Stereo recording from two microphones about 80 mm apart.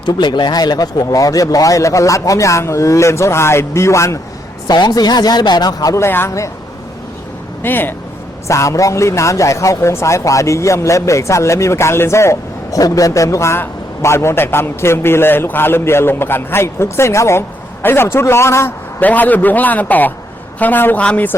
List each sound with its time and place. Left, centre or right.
0.0 s speech: left
4.7 s speech: left
5.9 s speech: left
7.6 s a man's voice: left
8.4 s speech: left
18.9 s a man's voice: left
21.0 s speech: centre